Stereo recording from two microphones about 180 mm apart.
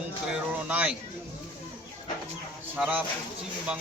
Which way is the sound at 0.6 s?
10° right (ahead or behind).